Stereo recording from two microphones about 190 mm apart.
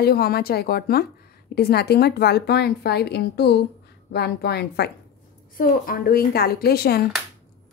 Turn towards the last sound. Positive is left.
turn(degrees=55)  # may be behind; listen again after turning